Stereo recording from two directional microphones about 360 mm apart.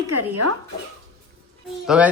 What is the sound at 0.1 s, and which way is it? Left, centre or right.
Speech, right.